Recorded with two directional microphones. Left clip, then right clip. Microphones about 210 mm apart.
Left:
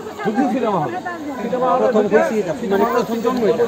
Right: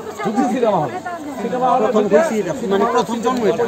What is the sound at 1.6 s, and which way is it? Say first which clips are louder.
Speech: even; 40° right (ahead or behind).